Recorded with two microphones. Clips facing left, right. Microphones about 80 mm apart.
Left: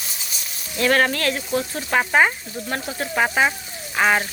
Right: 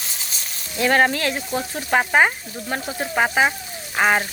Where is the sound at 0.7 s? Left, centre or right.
Centre.